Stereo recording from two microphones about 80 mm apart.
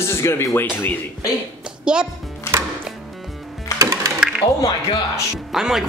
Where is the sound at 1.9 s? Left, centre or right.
Centre.